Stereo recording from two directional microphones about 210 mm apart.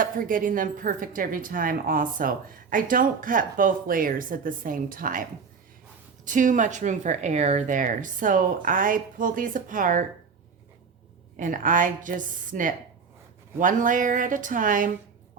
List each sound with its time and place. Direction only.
0.0 s speech: 40° right (ahead or behind)
6.2 s speech: 35° right (ahead or behind)
11.3 s speech: 40° right (ahead or behind)